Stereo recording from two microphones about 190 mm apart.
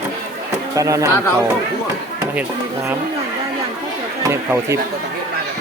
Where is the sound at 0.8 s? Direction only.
15° right (ahead or behind).